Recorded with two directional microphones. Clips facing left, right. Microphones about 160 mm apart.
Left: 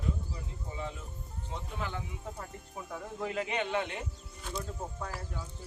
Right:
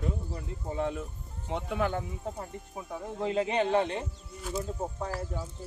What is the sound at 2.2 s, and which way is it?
Speech, 20° right (ahead or behind).